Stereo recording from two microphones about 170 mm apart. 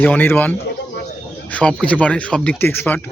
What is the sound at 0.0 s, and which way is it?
Speech, 10° left (ahead or behind).